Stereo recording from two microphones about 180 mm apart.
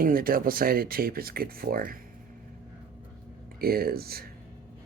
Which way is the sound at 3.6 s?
55° right (ahead or behind).